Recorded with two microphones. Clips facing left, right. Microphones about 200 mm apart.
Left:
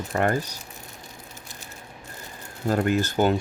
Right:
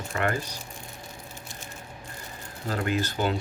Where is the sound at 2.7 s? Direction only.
45° left (ahead or behind).